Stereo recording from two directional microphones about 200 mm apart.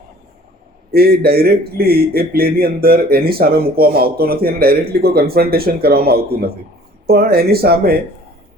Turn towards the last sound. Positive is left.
turn(degrees=-50)  # may be behind; listen again after turning